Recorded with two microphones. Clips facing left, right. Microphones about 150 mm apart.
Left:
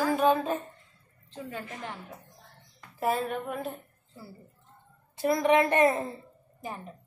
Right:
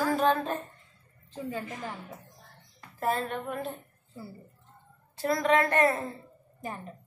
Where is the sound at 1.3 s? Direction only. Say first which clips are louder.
Right 3 dB; 5° right (ahead or behind).